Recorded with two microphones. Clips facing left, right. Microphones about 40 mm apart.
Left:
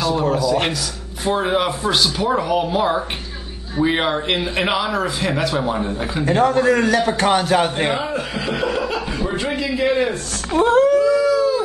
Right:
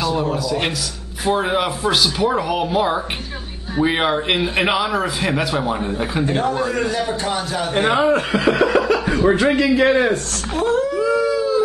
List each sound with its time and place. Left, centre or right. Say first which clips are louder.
0.1 s a man's voice: left 3 dB; centre
6.4 s a man's voice: left 5 dB; left
7.2 s a man's voice: left 6 dB; left
7.9 s speech: right 6 dB; right
9.3 s speech: right 8 dB; right
10.5 s speech: left 5 dB; left
11.0 s howl: left 3 dB; right